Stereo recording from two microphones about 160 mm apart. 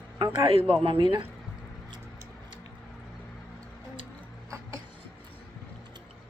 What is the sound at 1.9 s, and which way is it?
Music, 30° right (ahead or behind).